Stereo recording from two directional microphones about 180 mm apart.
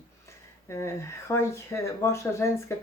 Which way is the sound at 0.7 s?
15° left (ahead or behind).